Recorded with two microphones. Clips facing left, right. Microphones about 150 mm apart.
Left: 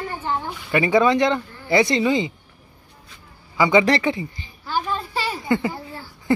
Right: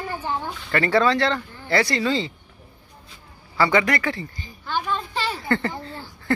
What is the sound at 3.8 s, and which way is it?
Speech, 30° left (ahead or behind).